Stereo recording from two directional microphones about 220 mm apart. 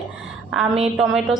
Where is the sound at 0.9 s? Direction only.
Centre (ahead or behind).